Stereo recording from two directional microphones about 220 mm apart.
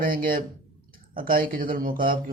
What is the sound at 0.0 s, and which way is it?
A man's voice, 40° right (ahead or behind).